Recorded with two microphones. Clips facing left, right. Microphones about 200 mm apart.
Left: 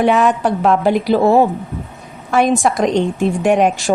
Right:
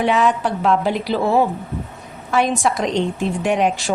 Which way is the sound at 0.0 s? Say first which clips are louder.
Left 4 dB; 50° left (ahead or behind).